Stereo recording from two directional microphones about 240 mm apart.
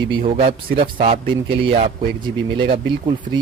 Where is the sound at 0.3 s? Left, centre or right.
Right.